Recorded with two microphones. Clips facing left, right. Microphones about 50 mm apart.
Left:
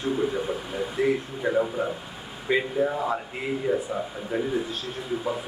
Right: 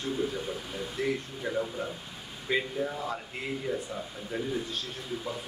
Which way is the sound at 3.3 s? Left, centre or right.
Centre.